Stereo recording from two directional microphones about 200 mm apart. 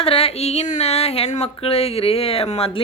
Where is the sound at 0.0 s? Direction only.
30° left (ahead or behind).